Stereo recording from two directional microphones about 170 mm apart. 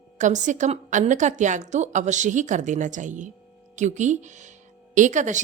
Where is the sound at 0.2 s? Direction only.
45° right (ahead or behind).